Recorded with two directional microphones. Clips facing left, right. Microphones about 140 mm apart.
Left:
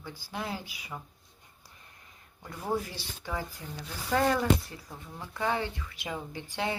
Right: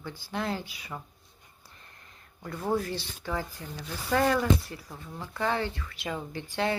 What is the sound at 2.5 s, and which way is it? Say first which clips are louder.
Speech: right 3 dB; 15° left (ahead or behind).